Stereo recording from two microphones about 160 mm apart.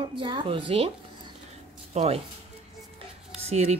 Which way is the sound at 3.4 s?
40° right (ahead or behind).